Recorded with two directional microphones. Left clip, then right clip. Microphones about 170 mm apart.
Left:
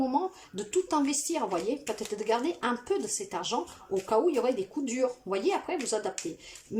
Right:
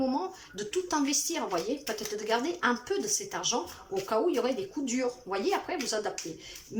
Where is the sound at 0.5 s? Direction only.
25° left (ahead or behind).